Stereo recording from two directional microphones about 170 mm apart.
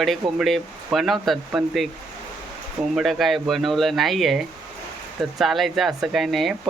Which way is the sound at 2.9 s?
Centre (ahead or behind).